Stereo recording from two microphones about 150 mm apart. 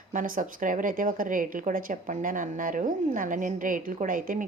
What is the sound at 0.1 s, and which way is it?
Speech, 60° right (ahead or behind).